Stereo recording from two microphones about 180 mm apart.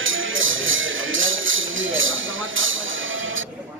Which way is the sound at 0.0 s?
90° right.